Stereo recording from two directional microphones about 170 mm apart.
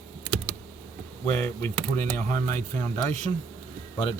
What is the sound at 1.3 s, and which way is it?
Speech, 15° left (ahead or behind).